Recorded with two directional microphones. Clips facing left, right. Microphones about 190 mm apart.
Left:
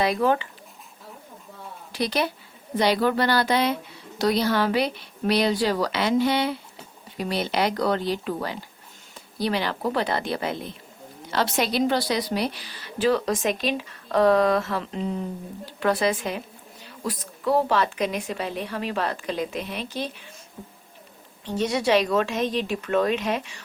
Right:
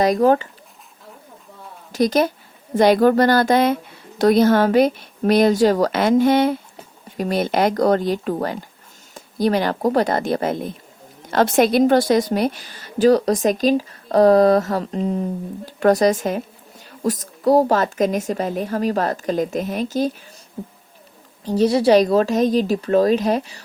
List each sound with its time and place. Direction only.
0.0 s speech: 40° right (ahead or behind)
1.9 s a woman's voice: 45° right (ahead or behind)
21.4 s speech: 35° right (ahead or behind)